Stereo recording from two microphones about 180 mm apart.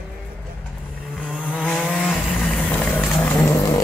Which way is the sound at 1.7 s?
5° left (ahead or behind).